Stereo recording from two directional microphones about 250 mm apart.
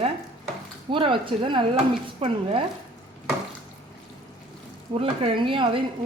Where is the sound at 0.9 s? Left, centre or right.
Centre.